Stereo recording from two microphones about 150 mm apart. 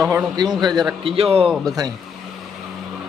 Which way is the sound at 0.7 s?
Centre (ahead or behind).